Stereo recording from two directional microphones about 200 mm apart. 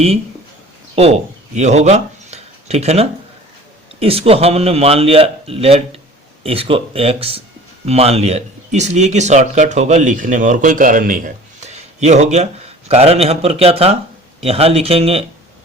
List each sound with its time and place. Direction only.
0.9 s a man's voice: 30° right (ahead or behind)